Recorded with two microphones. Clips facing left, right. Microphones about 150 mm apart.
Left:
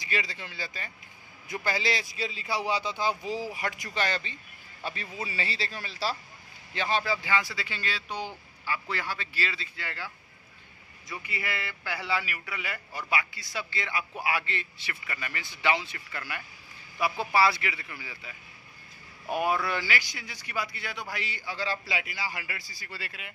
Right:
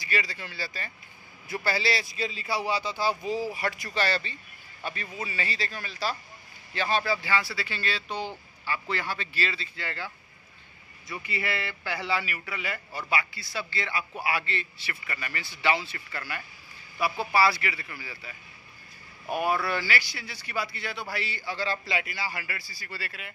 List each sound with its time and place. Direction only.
0.0 s a man's voice: 20° left (ahead or behind)
6.7 s a man's voice: 20° left (ahead or behind)
11.1 s a man's voice: 10° left (ahead or behind)
19.3 s a man's voice: 20° left (ahead or behind)